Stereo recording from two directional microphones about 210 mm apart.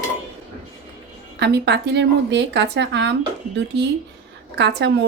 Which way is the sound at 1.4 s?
50° right (ahead or behind).